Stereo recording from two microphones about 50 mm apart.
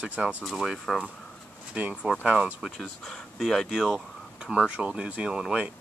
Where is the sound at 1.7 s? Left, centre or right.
Right; by 2.7 s centre.